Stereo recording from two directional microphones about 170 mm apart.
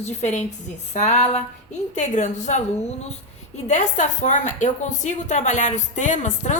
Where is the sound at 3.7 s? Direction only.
45° left (ahead or behind).